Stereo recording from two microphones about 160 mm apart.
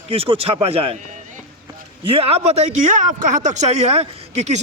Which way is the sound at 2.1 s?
40° right (ahead or behind).